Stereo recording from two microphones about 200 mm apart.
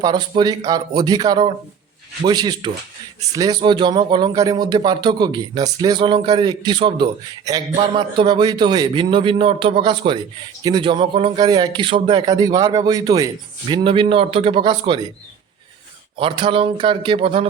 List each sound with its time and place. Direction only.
0.0 s speech: 20° right (ahead or behind)
16.1 s speech: 25° right (ahead or behind)